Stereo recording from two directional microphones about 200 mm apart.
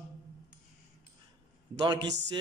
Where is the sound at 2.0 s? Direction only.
60° right (ahead or behind).